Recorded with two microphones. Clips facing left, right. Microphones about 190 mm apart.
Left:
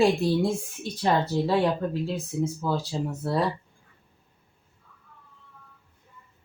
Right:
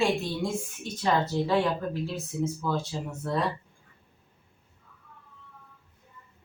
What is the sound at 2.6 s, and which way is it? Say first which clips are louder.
Speech: left 2 dB; 30° left (ahead or behind).